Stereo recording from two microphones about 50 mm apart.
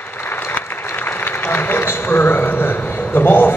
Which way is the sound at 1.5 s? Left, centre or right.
Left.